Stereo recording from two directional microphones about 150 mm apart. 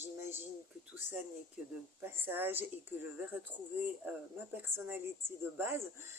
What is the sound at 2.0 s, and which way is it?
Speech, 15° right (ahead or behind).